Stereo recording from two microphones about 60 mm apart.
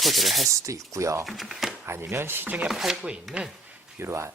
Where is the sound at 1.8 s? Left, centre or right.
Right.